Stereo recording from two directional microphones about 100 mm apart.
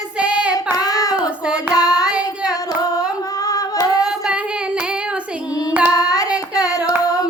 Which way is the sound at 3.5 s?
40° left (ahead or behind).